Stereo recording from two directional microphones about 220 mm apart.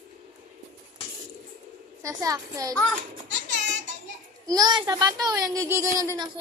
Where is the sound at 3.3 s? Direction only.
55° right (ahead or behind).